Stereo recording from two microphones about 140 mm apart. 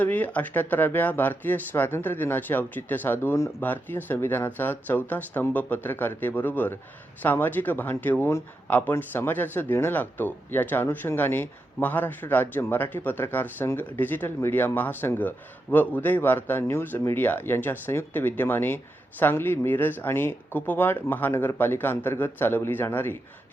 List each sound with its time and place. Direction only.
0.0 s speech: 10° left (ahead or behind)